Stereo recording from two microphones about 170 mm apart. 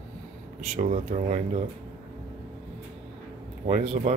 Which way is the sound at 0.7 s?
45° right (ahead or behind).